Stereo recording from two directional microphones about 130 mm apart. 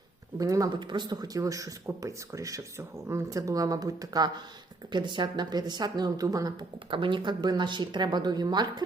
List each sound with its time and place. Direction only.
0.3 s speech: 25° right (ahead or behind)